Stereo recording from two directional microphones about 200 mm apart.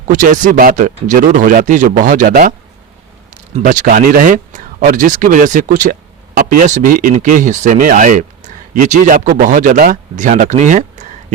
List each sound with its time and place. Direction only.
0.1 s speech: 40° right (ahead or behind)
3.5 s speech: 40° right (ahead or behind)